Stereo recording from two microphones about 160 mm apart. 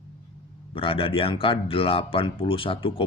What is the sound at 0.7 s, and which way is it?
Speech, 35° left (ahead or behind).